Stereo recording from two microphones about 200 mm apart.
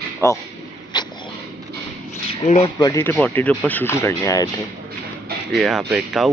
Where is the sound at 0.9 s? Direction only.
20° left (ahead or behind).